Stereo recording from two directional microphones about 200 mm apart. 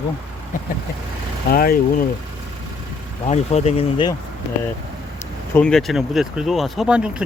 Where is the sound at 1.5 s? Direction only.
50° left (ahead or behind).